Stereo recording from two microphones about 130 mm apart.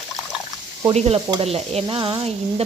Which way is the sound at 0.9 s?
50° right (ahead or behind).